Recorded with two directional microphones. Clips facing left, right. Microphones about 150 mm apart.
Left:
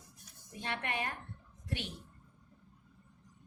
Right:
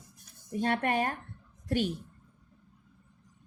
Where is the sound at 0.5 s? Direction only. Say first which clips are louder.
Right 10 dB; 45° right (ahead or behind).